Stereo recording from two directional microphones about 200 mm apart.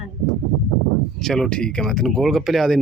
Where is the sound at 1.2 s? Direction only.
Centre (ahead or behind).